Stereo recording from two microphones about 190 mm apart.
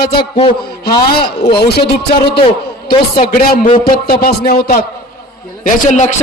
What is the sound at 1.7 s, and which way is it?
Speech, 60° left (ahead or behind).